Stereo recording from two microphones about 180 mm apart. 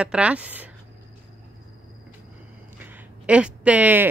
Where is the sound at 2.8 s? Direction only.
5° right (ahead or behind).